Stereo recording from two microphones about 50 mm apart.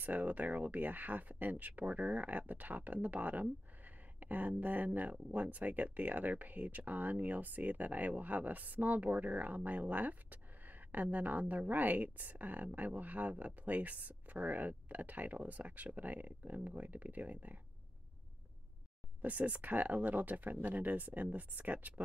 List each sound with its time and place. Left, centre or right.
0.0 s speech: right
19.2 s speech: right